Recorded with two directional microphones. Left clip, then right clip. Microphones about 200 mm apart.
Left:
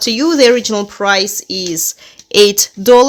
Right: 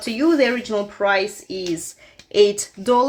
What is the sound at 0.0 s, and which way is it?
Speech, 55° left (ahead or behind).